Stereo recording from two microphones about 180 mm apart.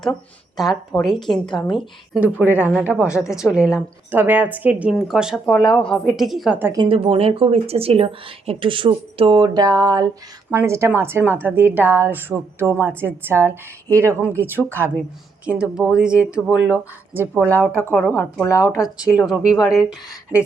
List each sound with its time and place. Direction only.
0.0 s a woman's voice: centre (ahead or behind)
3.2 s a woman's voice: 15° left (ahead or behind)
3.4 s speech: 5° right (ahead or behind)
6.7 s a woman's voice: 30° right (ahead or behind); by 17.2 s 10° right (ahead or behind)
17.3 s a woman's voice: 10° left (ahead or behind)
19.2 s speech: 5° right (ahead or behind)
19.5 s a woman's voice: 20° left (ahead or behind)